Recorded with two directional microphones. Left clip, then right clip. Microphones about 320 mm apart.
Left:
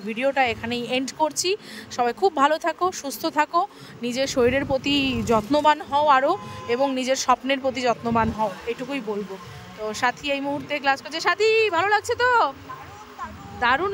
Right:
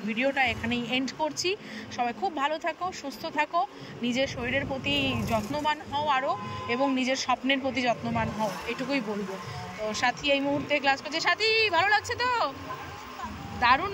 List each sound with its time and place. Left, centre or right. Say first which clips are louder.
0.1 s speech: left 4 dB; centre
13.6 s speech: left 2 dB; centre